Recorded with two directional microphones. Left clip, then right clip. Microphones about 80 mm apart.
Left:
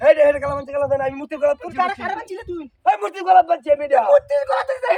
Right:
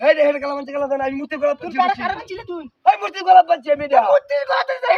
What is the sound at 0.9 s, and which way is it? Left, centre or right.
Speech, right.